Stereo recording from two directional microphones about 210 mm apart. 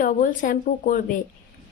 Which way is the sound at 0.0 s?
40° left (ahead or behind).